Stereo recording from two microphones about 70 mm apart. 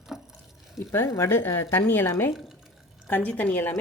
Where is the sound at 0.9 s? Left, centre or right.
Left.